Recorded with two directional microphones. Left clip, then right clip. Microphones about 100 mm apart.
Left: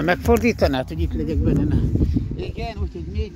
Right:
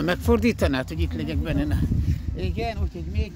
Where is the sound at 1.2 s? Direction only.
70° right (ahead or behind).